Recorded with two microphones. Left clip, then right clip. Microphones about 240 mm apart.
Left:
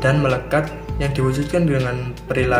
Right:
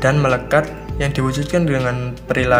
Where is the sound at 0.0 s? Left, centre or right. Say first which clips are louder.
Right 2 dB; right.